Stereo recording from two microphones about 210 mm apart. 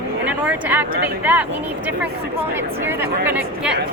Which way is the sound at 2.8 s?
10° right (ahead or behind).